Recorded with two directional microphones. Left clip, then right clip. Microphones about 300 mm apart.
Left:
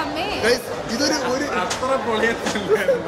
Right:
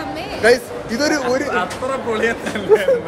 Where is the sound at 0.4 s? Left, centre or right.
Centre.